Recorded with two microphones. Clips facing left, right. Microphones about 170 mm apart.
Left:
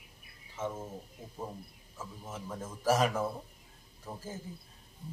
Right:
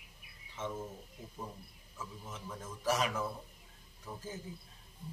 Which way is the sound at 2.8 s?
45° left (ahead or behind).